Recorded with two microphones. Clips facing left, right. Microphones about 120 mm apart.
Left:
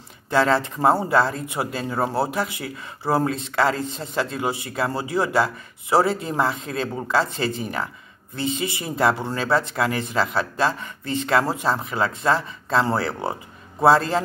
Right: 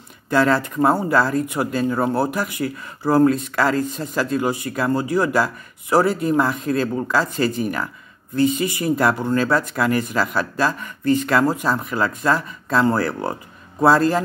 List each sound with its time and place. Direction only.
0.3 s speech: 25° left (ahead or behind)